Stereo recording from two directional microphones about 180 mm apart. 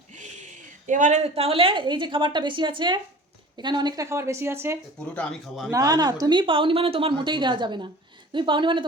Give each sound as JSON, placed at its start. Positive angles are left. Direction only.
{"t": 0.1, "sound": "a sound", "side_deg": -40}
{"t": 0.9, "sound": "a woman's voice", "side_deg": -45}
{"t": 5.1, "sound": "a man's voice", "side_deg": 5}
{"t": 5.7, "sound": "a woman's voice", "side_deg": -20}